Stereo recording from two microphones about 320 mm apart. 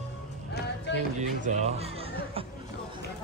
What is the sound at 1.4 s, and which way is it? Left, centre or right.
Speech, right.